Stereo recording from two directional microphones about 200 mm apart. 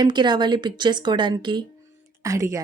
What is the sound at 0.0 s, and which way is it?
A woman's voice, 20° right (ahead or behind).